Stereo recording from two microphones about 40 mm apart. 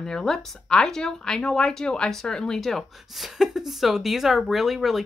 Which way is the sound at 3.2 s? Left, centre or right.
Centre.